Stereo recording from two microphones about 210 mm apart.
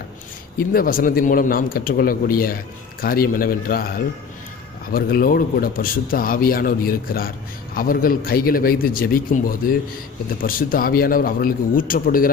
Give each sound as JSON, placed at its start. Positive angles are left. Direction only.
{"t": 0.5, "sound": "a man's voice", "side_deg": 45}